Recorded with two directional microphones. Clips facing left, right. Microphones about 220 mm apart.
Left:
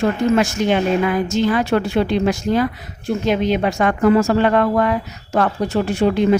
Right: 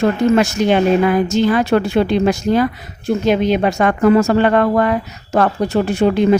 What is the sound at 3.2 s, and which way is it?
Speech, 40° right (ahead or behind).